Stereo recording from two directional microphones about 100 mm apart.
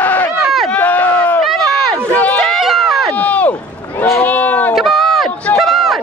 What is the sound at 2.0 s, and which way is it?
Run, 15° left (ahead or behind).